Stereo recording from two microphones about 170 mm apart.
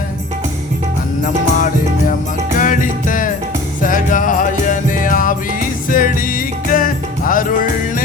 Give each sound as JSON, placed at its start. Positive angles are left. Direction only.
{"t": 1.2, "sound": "music", "side_deg": 50}